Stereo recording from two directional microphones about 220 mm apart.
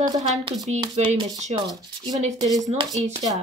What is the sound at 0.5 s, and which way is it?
Speech, 30° right (ahead or behind).